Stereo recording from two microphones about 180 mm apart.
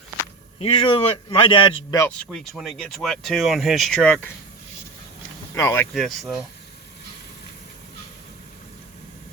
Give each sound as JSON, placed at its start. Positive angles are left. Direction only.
{"t": 0.6, "sound": "a man's voice", "side_deg": 30}
{"t": 2.0, "sound": "speech", "side_deg": 10}
{"t": 5.5, "sound": "speech", "side_deg": 15}
{"t": 5.9, "sound": "speech", "side_deg": 0}